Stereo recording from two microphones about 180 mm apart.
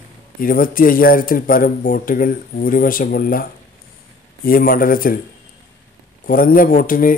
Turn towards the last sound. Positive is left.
turn(degrees=50)  # may be behind; listen again after turning